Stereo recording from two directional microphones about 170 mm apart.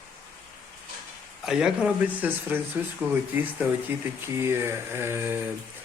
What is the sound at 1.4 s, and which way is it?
Speech, 5° right (ahead or behind).